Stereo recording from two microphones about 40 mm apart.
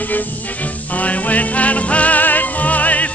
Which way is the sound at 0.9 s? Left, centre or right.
Left.